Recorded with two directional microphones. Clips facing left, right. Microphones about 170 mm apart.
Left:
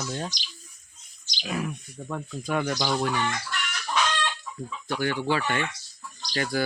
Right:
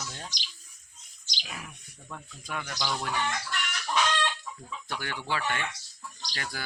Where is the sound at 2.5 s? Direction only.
45° left (ahead or behind).